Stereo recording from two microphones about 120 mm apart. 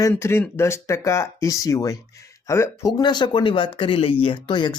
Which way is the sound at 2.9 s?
35° left (ahead or behind).